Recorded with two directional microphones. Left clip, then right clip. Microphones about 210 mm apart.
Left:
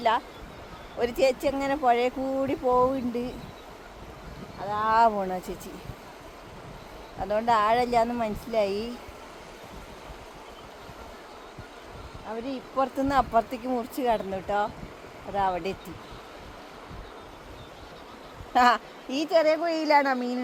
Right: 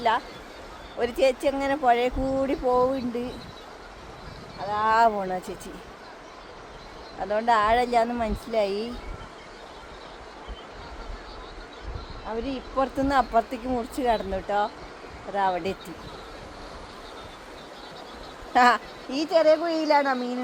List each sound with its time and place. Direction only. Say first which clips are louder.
0.9 s speech: right 1 dB; 25° left (ahead or behind)
4.6 s speech: right 1 dB; 20° left (ahead or behind)
7.2 s speech: right 1 dB; 20° left (ahead or behind)
12.5 s speech: even; 20° left (ahead or behind)
18.5 s a woman's voice: right 2 dB; 25° left (ahead or behind); by 20.4 s 45° left (ahead or behind)